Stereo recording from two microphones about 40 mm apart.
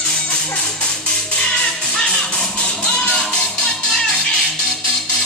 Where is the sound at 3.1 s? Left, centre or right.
Left.